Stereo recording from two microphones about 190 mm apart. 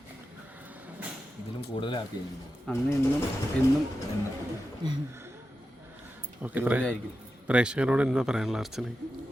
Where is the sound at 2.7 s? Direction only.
5° left (ahead or behind).